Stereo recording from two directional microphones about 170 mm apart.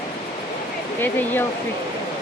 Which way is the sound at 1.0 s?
10° left (ahead or behind).